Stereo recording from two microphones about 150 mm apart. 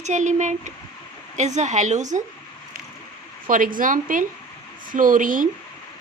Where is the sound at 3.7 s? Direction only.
65° right (ahead or behind).